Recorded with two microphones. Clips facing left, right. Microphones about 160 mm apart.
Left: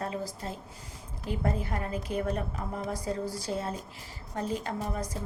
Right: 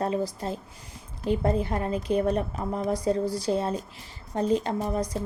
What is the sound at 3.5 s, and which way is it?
A woman's voice, 20° right (ahead or behind).